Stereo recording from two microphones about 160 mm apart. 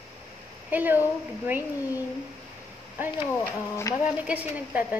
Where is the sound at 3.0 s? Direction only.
10° right (ahead or behind).